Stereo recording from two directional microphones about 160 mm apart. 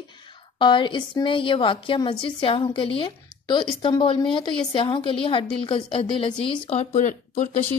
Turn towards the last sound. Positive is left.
turn(degrees=50)  # may be behind; listen again after turning